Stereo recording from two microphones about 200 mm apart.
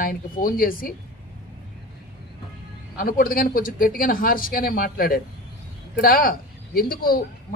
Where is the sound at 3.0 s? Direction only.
45° left (ahead or behind).